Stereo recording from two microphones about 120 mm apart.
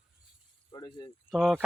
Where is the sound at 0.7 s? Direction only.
35° left (ahead or behind).